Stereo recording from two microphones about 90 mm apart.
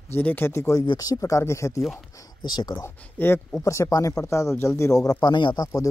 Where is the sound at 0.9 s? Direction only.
45° left (ahead or behind).